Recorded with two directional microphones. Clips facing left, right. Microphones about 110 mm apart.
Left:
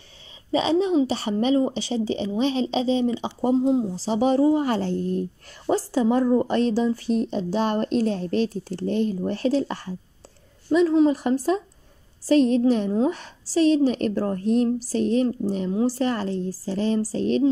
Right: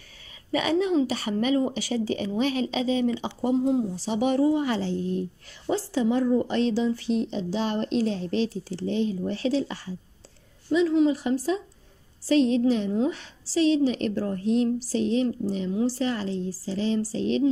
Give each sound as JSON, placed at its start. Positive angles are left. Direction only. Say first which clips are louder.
{"t": 0.5, "sound": "speech", "louder": "left 3 dB", "side_deg": 25}